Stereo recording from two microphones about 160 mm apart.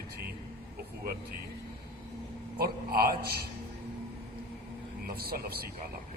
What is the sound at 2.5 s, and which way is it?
Speech, 70° right (ahead or behind).